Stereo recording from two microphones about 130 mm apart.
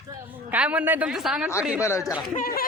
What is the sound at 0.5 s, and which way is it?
Speech, 10° right (ahead or behind).